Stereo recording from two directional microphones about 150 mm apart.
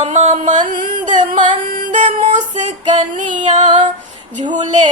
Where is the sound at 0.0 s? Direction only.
50° right (ahead or behind).